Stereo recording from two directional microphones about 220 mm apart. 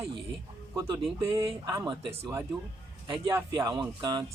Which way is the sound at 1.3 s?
15° right (ahead or behind).